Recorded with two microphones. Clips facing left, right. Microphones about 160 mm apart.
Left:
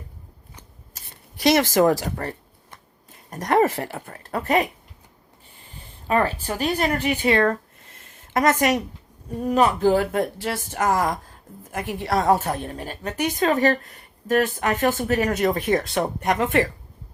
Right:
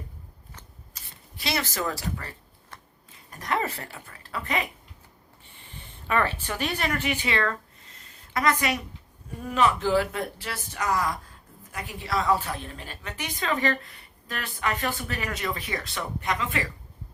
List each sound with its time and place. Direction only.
1.5 s a woman's voice: 45° left (ahead or behind)